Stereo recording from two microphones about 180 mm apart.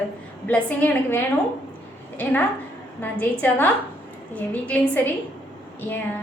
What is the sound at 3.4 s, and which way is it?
A woman's voice, 10° left (ahead or behind).